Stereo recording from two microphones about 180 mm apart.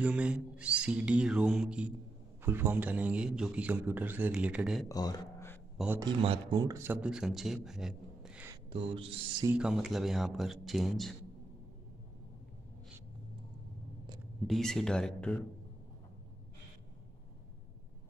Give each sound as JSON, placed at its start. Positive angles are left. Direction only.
{"t": 0.0, "sound": "a man's voice", "side_deg": -5}
{"t": 4.8, "sound": "speech", "side_deg": 20}
{"t": 5.9, "sound": "a man's voice", "side_deg": -25}
{"t": 6.6, "sound": "speech", "side_deg": -15}
{"t": 8.7, "sound": "speech", "side_deg": -30}
{"t": 9.5, "sound": "speech", "side_deg": -5}
{"t": 14.5, "sound": "speech", "side_deg": 0}